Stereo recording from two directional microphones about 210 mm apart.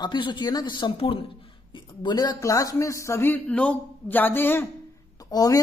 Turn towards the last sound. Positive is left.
turn(degrees=15)  # may be behind; listen again after turning